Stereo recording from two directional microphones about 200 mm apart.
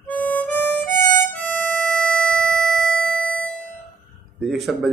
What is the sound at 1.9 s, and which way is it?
Music, 5° left (ahead or behind).